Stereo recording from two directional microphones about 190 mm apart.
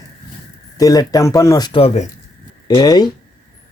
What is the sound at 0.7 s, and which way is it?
Speech, 20° left (ahead or behind).